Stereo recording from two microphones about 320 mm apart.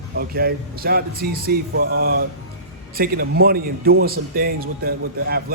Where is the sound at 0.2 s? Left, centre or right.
Right.